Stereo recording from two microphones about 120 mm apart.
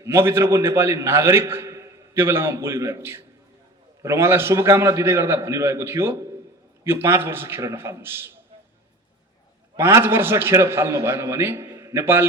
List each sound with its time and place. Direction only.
0.0 s a man's voice: 20° right (ahead or behind)
9.7 s a man's voice: 20° right (ahead or behind)